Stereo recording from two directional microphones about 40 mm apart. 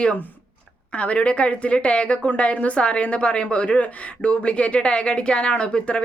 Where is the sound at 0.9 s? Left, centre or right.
Left.